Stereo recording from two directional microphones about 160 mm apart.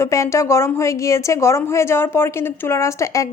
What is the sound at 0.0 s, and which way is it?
A woman's voice, 20° left (ahead or behind).